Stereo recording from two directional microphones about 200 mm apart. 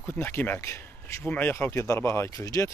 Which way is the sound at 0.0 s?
10° left (ahead or behind).